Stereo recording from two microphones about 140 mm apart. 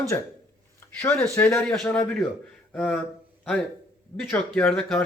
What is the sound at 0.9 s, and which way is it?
Speech, 15° left (ahead or behind).